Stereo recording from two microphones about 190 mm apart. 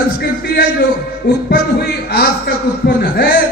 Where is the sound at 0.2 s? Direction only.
55° left (ahead or behind).